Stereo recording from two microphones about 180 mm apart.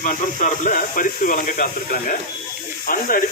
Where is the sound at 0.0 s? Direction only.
50° left (ahead or behind).